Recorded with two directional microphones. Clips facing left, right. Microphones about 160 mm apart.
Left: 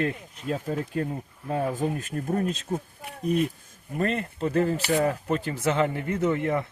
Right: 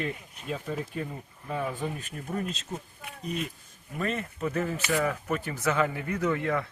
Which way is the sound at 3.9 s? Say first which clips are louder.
Left 4 dB; 35° left (ahead or behind).